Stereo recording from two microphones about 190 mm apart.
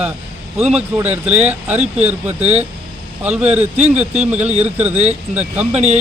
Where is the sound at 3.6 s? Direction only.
35° right (ahead or behind).